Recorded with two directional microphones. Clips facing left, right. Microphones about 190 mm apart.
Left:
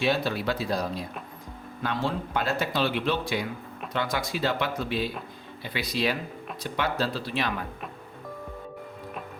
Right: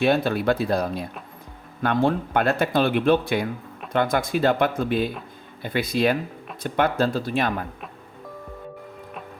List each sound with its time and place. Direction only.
0.0 s speech: 55° right (ahead or behind)